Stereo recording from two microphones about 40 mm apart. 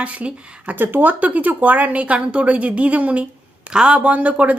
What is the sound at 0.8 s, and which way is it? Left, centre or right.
Speech, right.